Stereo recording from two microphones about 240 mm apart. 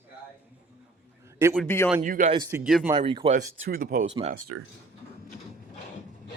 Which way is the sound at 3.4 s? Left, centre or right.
Right.